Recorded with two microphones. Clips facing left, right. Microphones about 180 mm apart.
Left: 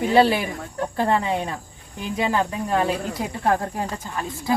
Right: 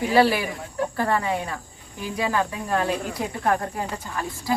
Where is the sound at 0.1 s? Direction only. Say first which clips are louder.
Left 1 dB; 20° left (ahead or behind).